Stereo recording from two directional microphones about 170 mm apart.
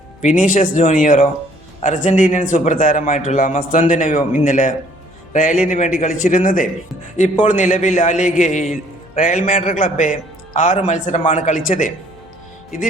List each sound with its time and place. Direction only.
0.2 s a man's voice: 45° left (ahead or behind)